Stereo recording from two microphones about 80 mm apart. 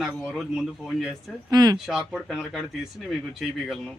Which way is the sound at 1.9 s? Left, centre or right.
Centre.